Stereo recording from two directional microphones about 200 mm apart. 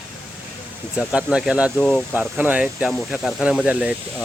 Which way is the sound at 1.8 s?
5° left (ahead or behind).